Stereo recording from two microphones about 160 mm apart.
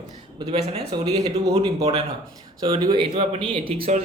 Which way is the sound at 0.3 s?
35° right (ahead or behind).